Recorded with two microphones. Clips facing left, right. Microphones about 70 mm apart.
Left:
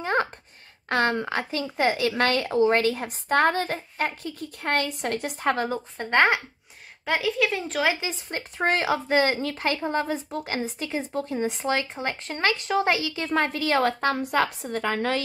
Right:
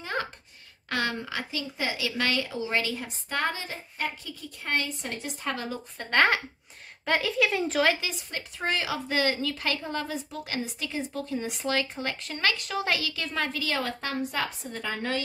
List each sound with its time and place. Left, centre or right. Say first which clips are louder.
0.0 s a sound: left 7 dB; left
0.8 s a woman's voice: left 6 dB; left
5.9 s speech: left 2 dB; left
7.1 s speech: left 1 dB; centre
8.0 s speech: left 3 dB; left
13.3 s a woman's voice: left 8 dB; left